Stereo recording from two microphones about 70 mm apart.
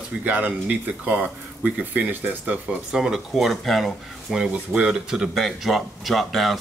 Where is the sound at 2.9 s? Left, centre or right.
Centre.